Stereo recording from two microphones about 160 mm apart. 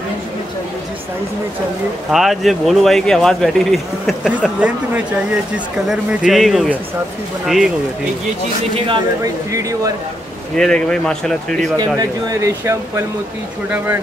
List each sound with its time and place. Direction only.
2.0 s speech: centre (ahead or behind)
8.7 s speech: 30° right (ahead or behind)
9.5 s speech: 20° right (ahead or behind)
10.5 s speech: 5° left (ahead or behind)
11.7 s speech: 25° right (ahead or behind)